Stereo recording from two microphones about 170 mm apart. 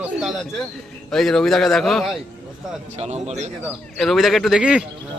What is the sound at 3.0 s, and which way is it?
Speech, 40° right (ahead or behind).